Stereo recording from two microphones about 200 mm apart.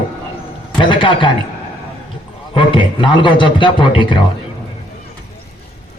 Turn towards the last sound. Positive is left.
turn(degrees=25)  # may be behind; listen again after turning